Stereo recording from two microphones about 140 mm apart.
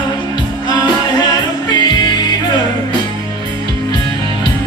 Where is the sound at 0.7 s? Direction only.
30° left (ahead or behind).